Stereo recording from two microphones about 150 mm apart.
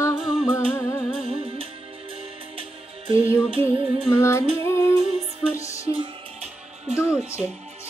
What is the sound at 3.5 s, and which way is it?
Music, 40° right (ahead or behind).